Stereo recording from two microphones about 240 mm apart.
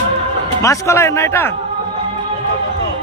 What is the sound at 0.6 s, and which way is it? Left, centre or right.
Speech, centre.